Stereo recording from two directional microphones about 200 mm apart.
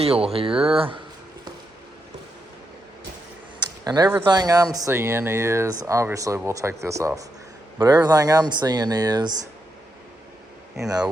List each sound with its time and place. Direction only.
0.0 s speech: 30° right (ahead or behind)
3.8 s speech: 20° right (ahead or behind)